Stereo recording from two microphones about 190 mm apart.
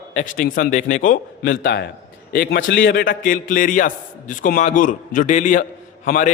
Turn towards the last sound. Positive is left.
turn(degrees=45)  # may be behind; listen again after turning